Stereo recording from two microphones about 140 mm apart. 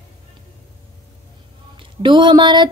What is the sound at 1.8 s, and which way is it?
Speech, 35° right (ahead or behind).